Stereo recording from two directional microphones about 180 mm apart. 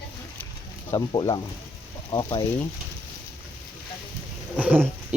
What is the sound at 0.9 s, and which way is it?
Speech, 25° left (ahead or behind).